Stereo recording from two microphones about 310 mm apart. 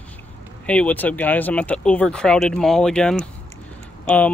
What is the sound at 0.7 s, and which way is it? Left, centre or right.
Speech, centre.